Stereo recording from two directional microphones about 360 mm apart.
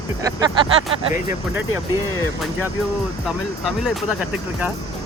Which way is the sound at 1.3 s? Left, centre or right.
Left.